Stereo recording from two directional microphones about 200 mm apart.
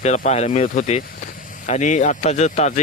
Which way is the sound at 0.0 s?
35° left (ahead or behind).